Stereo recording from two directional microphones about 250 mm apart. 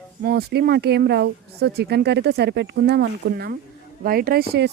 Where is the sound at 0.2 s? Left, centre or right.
Right.